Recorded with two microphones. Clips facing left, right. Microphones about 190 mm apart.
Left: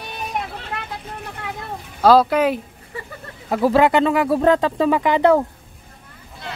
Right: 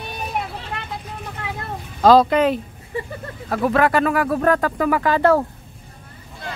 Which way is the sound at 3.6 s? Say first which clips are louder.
Left 2 dB; 25° left (ahead or behind).